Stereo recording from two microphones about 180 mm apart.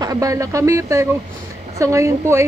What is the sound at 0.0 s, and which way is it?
Speech, 20° right (ahead or behind).